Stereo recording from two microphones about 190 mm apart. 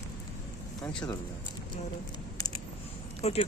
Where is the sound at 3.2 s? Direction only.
35° left (ahead or behind).